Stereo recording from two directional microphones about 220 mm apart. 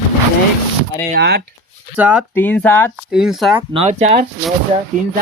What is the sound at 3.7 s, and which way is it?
Speech, 25° right (ahead or behind).